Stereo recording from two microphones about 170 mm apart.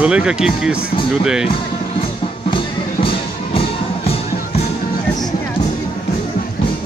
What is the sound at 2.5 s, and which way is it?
Music, 30° left (ahead or behind).